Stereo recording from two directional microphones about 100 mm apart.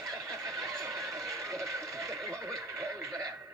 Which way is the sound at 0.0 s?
35° right (ahead or behind).